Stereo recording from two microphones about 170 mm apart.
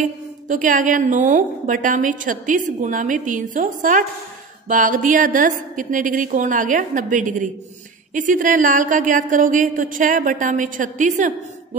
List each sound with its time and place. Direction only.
0.0 s a woman's voice: 50° right (ahead or behind)